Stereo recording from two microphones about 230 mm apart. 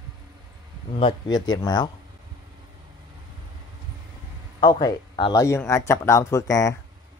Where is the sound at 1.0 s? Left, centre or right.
Centre.